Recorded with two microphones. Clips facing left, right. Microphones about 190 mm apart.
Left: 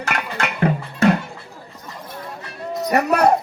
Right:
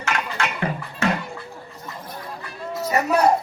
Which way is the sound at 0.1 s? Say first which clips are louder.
Right 1 dB; 60° left (ahead or behind).